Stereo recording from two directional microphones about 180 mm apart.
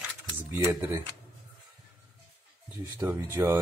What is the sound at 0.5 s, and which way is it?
Speech, 10° right (ahead or behind).